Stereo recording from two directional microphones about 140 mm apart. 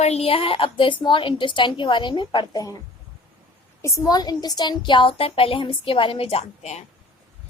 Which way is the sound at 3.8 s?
20° left (ahead or behind).